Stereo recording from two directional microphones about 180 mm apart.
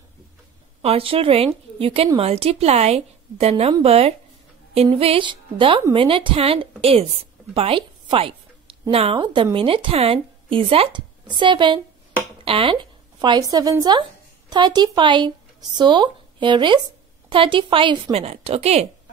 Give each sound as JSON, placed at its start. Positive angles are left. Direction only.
{"t": 0.8, "sound": "a woman's voice", "side_deg": -30}